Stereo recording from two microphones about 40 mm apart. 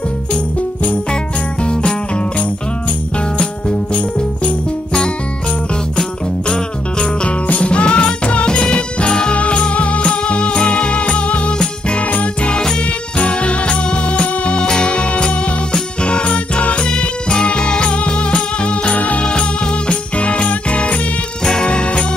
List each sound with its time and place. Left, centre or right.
1.6 s music: left
3.3 s jingle bell: left
7.2 s music: left
11.5 s music: centre
12.1 s music: left
20.2 s jingle bell: left
21.6 s music: left